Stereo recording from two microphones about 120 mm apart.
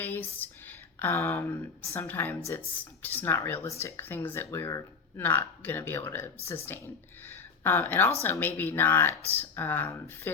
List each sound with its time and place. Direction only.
0.0 s speech: 15° left (ahead or behind)
7.6 s speech: 20° left (ahead or behind)